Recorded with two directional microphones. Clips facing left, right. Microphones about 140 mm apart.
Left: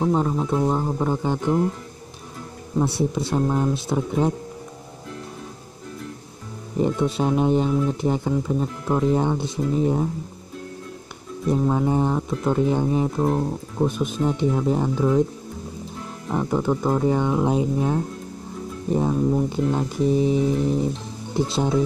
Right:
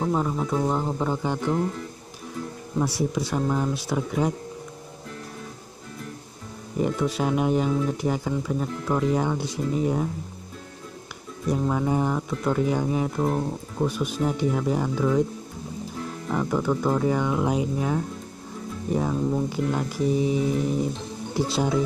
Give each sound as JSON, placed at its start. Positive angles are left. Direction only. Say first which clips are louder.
{"t": 0.0, "sound": "speech", "louder": "left 3 dB", "side_deg": 15}
{"t": 2.8, "sound": "speech", "louder": "left 3 dB", "side_deg": 25}
{"t": 6.8, "sound": "speech", "louder": "left 3 dB", "side_deg": 25}
{"t": 11.6, "sound": "speech", "louder": "left 2 dB", "side_deg": 20}
{"t": 13.2, "sound": "speech", "louder": "left 3 dB", "side_deg": 10}
{"t": 13.8, "sound": "speech", "louder": "left 2 dB", "side_deg": 20}
{"t": 16.3, "sound": "speech", "louder": "left 2 dB", "side_deg": 20}
{"t": 18.9, "sound": "speech", "louder": "left 4 dB", "side_deg": 20}
{"t": 21.5, "sound": "speech", "louder": "right 1 dB", "side_deg": 20}